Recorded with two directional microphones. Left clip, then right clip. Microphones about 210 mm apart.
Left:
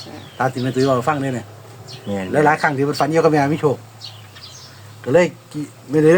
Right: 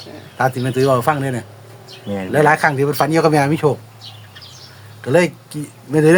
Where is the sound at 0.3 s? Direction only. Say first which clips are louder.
Right 2 dB; 45° right (ahead or behind).